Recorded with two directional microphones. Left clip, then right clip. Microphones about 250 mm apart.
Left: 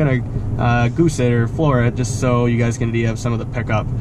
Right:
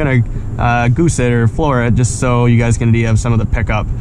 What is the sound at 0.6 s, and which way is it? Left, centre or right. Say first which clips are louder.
Speech: right 5 dB; centre.